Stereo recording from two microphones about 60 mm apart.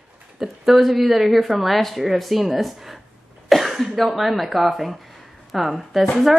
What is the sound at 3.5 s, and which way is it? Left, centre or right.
Cough, centre.